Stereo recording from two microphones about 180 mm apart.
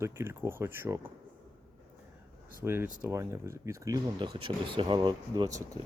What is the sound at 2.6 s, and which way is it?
Speech, 15° right (ahead or behind).